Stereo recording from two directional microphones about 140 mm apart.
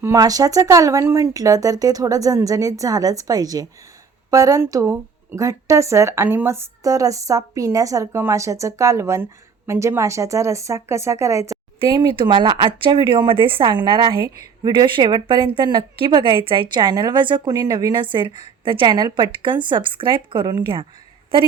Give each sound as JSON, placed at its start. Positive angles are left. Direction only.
{"t": 0.0, "sound": "speech", "side_deg": -25}
{"t": 11.8, "sound": "a woman's voice", "side_deg": -35}